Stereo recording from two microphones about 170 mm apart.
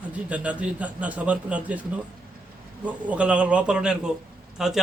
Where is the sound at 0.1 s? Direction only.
5° right (ahead or behind).